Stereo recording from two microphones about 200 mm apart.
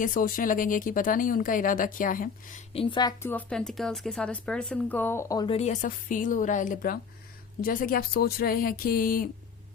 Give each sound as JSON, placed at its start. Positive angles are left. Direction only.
{"t": 0.0, "sound": "speech", "side_deg": 45}
{"t": 2.7, "sound": "a woman's voice", "side_deg": 25}
{"t": 3.2, "sound": "speech", "side_deg": 5}
{"t": 5.5, "sound": "a woman's voice", "side_deg": 35}